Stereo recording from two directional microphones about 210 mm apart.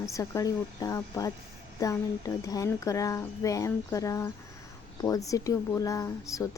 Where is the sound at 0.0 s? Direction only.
15° left (ahead or behind).